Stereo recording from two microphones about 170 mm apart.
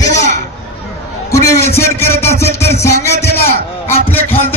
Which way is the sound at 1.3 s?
15° left (ahead or behind).